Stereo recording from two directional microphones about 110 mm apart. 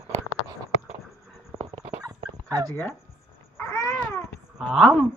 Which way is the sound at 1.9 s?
35° right (ahead or behind).